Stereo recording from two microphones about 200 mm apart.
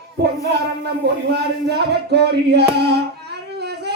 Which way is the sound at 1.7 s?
55° right (ahead or behind).